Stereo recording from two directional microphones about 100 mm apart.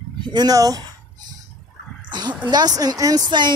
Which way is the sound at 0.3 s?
40° right (ahead or behind).